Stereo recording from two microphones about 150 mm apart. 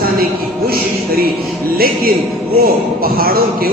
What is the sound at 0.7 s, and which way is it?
Music, 90° right.